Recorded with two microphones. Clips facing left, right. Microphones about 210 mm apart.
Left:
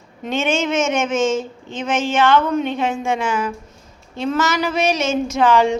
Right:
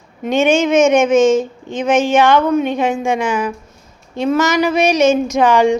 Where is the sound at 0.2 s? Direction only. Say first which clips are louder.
Right 7 dB; 15° right (ahead or behind).